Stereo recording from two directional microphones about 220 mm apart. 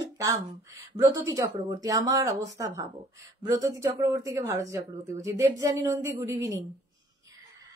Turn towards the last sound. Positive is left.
turn(degrees=-10)  # may be behind; listen again after turning